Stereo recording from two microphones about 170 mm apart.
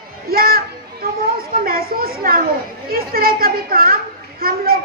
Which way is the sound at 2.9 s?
60° right (ahead or behind).